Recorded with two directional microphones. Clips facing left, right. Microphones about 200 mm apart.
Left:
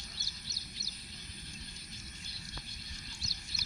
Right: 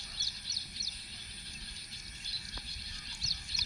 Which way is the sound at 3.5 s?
20° right (ahead or behind).